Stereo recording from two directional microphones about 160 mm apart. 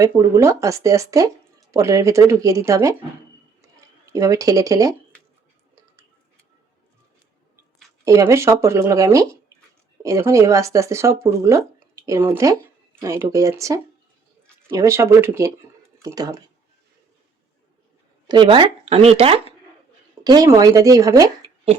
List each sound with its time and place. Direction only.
0.0 s speech: 20° right (ahead or behind)
4.1 s speech: 20° right (ahead or behind)
8.0 s speech: 20° right (ahead or behind)
18.3 s speech: 30° right (ahead or behind)
20.2 s speech: 25° right (ahead or behind)